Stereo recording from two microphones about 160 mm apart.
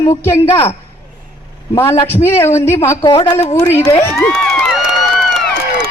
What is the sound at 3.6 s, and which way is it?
Speech, 15° left (ahead or behind).